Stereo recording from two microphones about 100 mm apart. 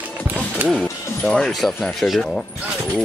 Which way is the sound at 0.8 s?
10° left (ahead or behind).